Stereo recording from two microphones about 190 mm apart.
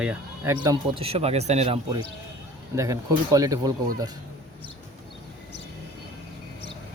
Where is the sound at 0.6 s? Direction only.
25° right (ahead or behind).